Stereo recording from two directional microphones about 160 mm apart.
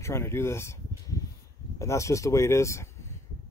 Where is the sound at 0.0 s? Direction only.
15° left (ahead or behind).